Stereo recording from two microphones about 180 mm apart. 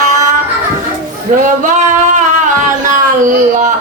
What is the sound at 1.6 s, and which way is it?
Singing, 45° right (ahead or behind).